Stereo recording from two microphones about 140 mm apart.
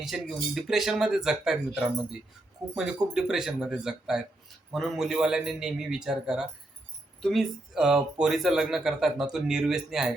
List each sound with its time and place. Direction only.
0.0 s speech: centre (ahead or behind)
2.6 s speech: 25° right (ahead or behind)
3.2 s speech: 5° right (ahead or behind)